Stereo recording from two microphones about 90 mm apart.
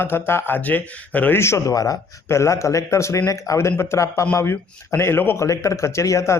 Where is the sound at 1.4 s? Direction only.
35° left (ahead or behind).